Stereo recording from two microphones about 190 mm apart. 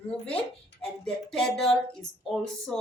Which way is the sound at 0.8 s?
5° left (ahead or behind).